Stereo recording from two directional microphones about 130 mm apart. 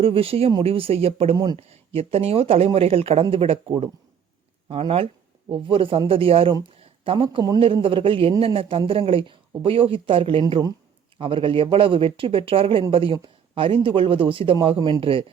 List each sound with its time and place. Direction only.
0.0 s speech: 45° right (ahead or behind)
10.5 s speech: 30° right (ahead or behind)
11.2 s speech: 45° right (ahead or behind)